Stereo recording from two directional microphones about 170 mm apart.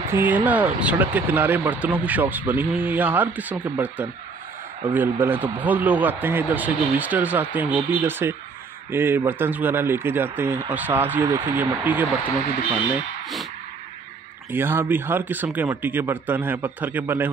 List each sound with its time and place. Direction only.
0.0 s speech: 10° right (ahead or behind)
14.5 s speech: 10° right (ahead or behind)